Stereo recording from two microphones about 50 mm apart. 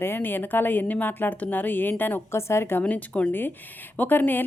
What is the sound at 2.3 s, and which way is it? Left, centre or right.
Speech, left.